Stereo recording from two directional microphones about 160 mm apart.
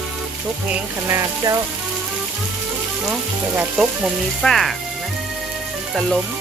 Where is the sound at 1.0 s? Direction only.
20° right (ahead or behind).